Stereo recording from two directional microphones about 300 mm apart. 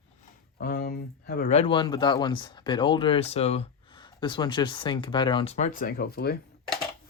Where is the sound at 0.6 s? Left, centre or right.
Left.